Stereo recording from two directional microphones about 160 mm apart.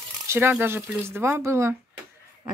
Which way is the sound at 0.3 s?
15° right (ahead or behind).